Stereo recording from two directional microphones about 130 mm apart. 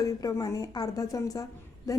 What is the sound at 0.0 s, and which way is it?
A woman's voice, 30° left (ahead or behind).